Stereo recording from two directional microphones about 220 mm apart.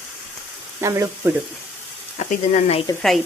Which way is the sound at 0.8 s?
15° right (ahead or behind).